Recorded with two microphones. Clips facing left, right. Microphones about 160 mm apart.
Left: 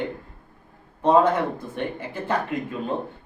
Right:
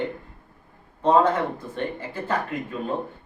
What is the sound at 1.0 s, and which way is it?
Speech, 15° left (ahead or behind).